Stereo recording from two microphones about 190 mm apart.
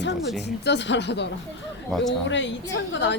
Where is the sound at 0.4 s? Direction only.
65° left (ahead or behind).